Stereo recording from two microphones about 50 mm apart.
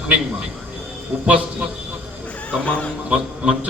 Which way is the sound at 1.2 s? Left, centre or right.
Right.